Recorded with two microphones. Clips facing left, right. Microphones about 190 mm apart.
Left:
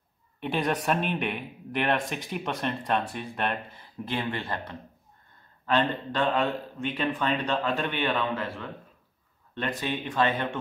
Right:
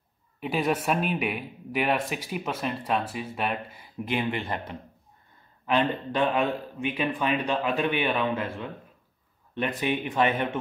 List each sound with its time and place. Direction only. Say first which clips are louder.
0.4 s speech: right 1 dB; 5° right (ahead or behind)